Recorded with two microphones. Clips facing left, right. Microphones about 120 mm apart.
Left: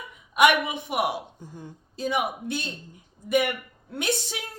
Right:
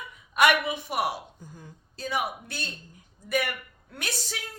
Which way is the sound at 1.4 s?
30° left (ahead or behind).